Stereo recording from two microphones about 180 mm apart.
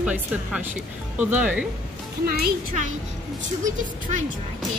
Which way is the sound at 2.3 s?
50° right (ahead or behind).